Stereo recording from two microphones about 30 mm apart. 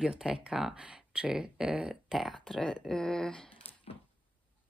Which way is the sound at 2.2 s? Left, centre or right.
Centre.